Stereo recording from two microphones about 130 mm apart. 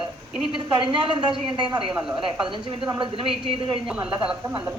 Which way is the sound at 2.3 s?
40° right (ahead or behind).